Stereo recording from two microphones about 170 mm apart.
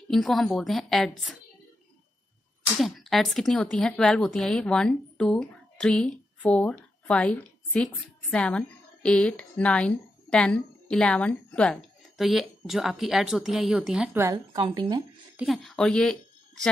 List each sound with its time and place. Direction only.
0.1 s a woman's voice: centre (ahead or behind)
2.8 s a woman's voice: centre (ahead or behind); by 15.0 s 25° right (ahead or behind)
15.3 s speech: centre (ahead or behind)